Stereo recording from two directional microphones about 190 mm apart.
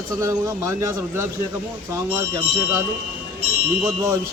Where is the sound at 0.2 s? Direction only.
15° right (ahead or behind).